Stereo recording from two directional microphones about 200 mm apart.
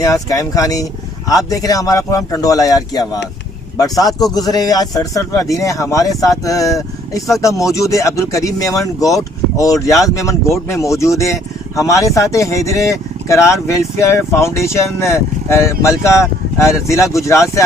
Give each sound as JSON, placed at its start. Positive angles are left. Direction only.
{"t": 0.0, "sound": "speech", "side_deg": 15}